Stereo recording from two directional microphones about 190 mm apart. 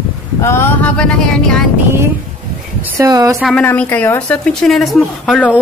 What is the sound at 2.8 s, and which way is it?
Speech, 15° right (ahead or behind).